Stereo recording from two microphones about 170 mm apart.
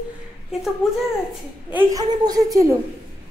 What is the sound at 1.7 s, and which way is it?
A woman's voice, 20° right (ahead or behind).